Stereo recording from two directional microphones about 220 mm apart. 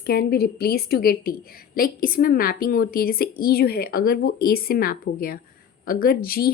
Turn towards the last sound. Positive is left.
turn(degrees=45)  # may be behind; listen again after turning